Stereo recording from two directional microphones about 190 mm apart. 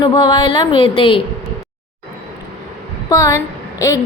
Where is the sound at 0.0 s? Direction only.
25° left (ahead or behind).